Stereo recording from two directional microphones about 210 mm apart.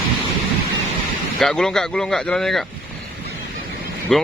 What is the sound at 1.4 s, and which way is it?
Speech, 5° left (ahead or behind).